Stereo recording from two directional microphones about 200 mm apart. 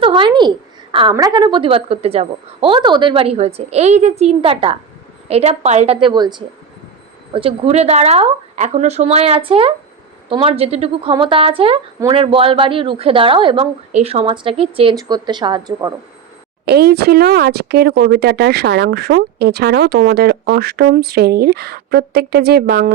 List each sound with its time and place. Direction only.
0.0 s a woman's voice: 25° right (ahead or behind)
16.6 s speech: 55° right (ahead or behind)